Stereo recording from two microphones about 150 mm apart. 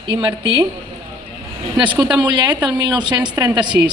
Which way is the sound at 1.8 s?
30° right (ahead or behind).